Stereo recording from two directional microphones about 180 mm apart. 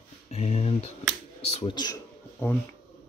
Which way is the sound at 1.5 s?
30° left (ahead or behind).